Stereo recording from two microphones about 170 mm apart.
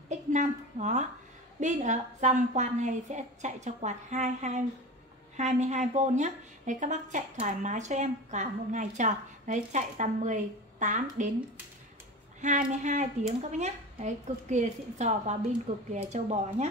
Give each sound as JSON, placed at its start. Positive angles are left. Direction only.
{"t": 0.1, "sound": "a sound", "side_deg": -45}
{"t": 1.6, "sound": "a woman's voice", "side_deg": -45}
{"t": 12.4, "sound": "a woman's voice", "side_deg": -45}